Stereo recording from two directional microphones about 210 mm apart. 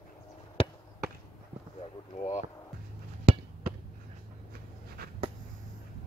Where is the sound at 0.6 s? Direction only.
25° left (ahead or behind).